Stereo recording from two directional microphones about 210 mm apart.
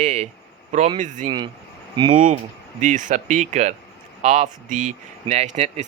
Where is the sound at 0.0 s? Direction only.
35° right (ahead or behind).